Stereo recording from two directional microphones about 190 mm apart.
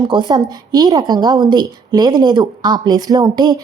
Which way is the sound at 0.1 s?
20° right (ahead or behind).